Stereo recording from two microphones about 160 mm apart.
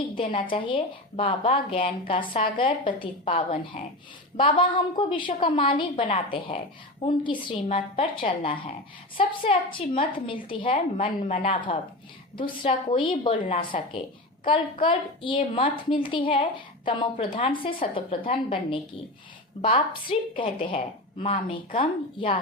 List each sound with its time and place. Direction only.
0.3 s a woman's voice: 30° left (ahead or behind)
11.2 s speech: 45° left (ahead or behind)
12.7 s a woman's voice: 40° left (ahead or behind)